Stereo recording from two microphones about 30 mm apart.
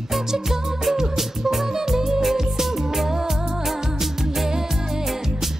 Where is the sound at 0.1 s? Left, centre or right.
Centre.